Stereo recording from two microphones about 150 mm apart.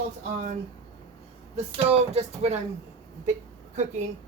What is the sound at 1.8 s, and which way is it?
Speech, 45° right (ahead or behind).